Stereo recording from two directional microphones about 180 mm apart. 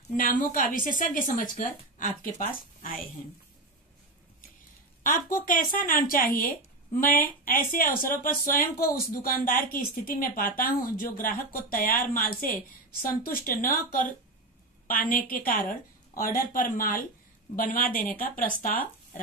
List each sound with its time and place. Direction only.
0.1 s speech: 50° left (ahead or behind)
5.0 s speech: 50° left (ahead or behind)